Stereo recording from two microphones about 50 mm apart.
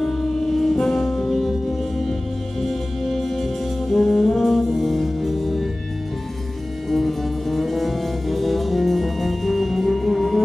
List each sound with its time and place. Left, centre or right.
0.0 s music: centre
3.9 s brass instrument: centre
6.9 s music: centre